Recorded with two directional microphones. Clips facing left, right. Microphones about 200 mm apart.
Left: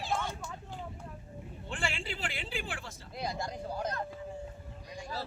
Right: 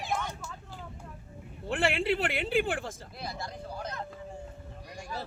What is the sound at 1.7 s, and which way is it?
Speech, 65° right (ahead or behind).